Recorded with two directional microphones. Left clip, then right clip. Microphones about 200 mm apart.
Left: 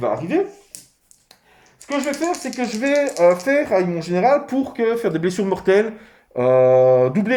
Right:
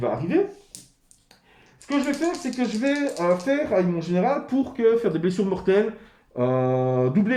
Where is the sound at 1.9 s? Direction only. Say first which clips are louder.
Left 2 dB; 35° left (ahead or behind).